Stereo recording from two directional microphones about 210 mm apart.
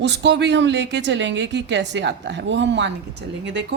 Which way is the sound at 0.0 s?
55° right (ahead or behind).